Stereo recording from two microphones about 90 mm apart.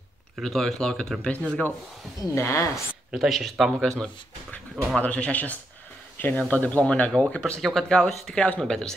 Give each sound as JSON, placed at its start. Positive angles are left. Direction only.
{"t": 0.4, "sound": "speech", "side_deg": 5}
{"t": 2.3, "sound": "a woman's voice", "side_deg": 30}
{"t": 2.7, "sound": "speech", "side_deg": -5}
{"t": 4.0, "sound": "speech", "side_deg": 10}